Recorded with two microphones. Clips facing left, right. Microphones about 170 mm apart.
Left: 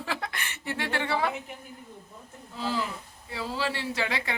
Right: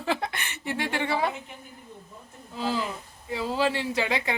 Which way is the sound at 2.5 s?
15° right (ahead or behind).